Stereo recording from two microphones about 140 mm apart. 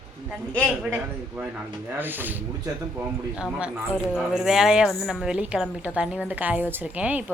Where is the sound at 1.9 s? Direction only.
15° right (ahead or behind).